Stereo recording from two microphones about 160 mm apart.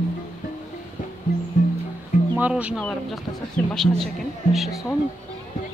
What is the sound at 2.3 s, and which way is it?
Speech, 10° right (ahead or behind).